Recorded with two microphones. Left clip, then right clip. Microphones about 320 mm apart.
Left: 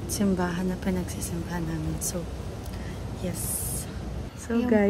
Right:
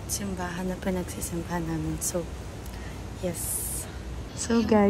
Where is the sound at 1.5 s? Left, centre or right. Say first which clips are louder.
Right 3 dB; centre.